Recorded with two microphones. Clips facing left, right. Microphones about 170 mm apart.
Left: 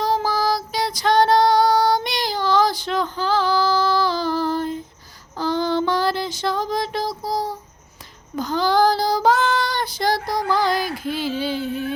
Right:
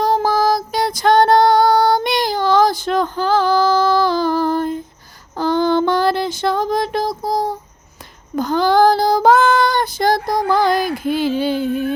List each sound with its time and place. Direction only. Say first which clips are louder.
0.0 s female singing: right 5 dB; 50° right (ahead or behind)
5.4 s child singing: right 5 dB; 55° right (ahead or behind)